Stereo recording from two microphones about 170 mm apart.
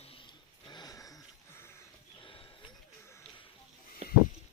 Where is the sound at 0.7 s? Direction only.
25° left (ahead or behind).